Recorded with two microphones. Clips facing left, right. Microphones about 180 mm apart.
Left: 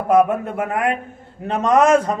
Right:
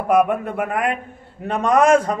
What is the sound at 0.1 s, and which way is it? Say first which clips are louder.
A man's voice: left 2 dB; 25° left (ahead or behind).